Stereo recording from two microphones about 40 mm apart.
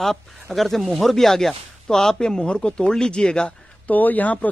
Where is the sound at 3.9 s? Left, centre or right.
Left.